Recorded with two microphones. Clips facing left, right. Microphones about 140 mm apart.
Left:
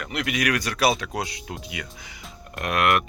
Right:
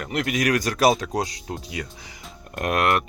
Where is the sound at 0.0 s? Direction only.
40° right (ahead or behind).